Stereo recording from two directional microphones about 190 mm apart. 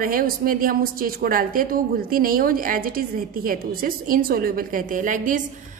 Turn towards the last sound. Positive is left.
turn(degrees=-45)  # may be behind; listen again after turning